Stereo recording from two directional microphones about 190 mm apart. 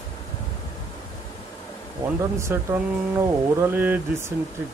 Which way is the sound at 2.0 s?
15° right (ahead or behind).